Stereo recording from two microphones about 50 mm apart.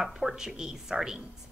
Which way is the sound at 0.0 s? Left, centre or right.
Centre.